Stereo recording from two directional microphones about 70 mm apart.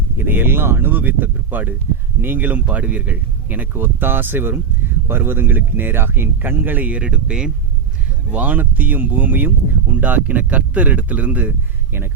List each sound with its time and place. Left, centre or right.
0.2 s speech: right